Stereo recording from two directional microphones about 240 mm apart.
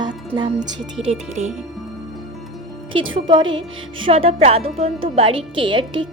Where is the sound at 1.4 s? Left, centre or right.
Right.